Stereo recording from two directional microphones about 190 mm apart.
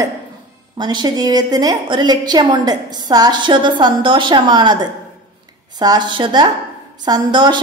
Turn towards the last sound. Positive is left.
turn(degrees=-25)  # may be behind; listen again after turning